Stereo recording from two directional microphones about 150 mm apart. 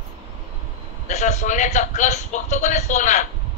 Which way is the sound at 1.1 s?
50° left (ahead or behind).